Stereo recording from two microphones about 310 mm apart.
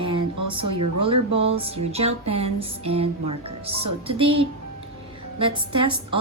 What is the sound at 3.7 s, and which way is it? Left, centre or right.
Speech, right.